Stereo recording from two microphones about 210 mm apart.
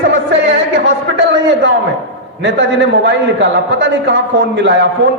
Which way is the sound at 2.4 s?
60° right (ahead or behind).